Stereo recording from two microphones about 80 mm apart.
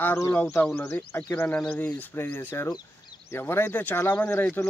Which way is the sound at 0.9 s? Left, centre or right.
Left.